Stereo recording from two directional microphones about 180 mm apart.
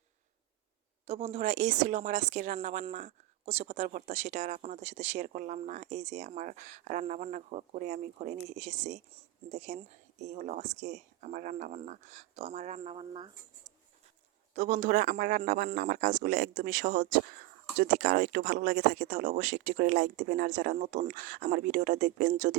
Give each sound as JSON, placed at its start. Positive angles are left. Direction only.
{"t": 1.0, "sound": "speech", "side_deg": -35}
{"t": 14.5, "sound": "speech", "side_deg": -45}